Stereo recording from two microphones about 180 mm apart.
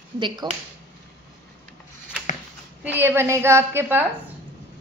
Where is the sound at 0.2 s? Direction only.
25° right (ahead or behind).